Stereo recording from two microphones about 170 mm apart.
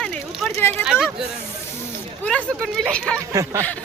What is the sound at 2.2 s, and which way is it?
Speech, 10° left (ahead or behind).